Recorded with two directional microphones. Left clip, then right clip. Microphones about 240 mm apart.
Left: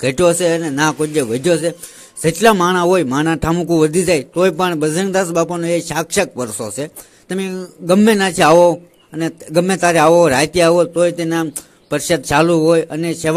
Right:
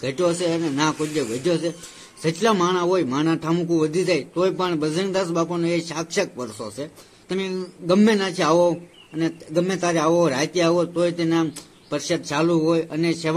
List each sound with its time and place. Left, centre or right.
0.0 s speech: left